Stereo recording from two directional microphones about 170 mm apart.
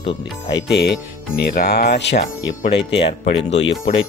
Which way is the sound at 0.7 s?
75° left (ahead or behind).